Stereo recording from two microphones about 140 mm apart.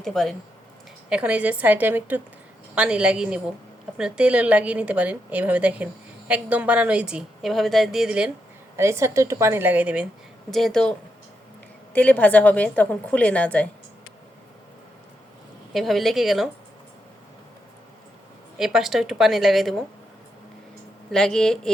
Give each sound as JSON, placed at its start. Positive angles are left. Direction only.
{"t": 0.0, "sound": "a woman's voice", "side_deg": 5}
{"t": 1.1, "sound": "a woman's voice", "side_deg": -10}
{"t": 8.7, "sound": "a woman's voice", "side_deg": -20}
{"t": 10.5, "sound": "a woman's voice", "side_deg": 5}
{"t": 11.9, "sound": "a woman's voice", "side_deg": 10}
{"t": 15.7, "sound": "a woman's voice", "side_deg": 0}
{"t": 18.5, "sound": "a woman's voice", "side_deg": -5}
{"t": 21.1, "sound": "a woman's voice", "side_deg": 5}